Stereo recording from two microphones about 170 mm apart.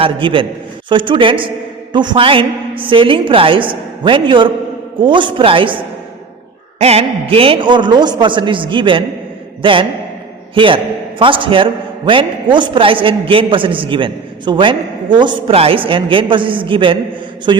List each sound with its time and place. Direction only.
0.0 s a man's voice: 30° right (ahead or behind)